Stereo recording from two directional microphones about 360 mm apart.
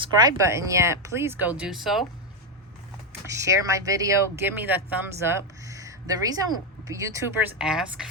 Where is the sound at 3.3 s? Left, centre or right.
Centre.